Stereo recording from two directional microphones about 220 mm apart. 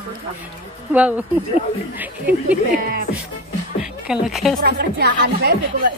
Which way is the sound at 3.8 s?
Centre (ahead or behind).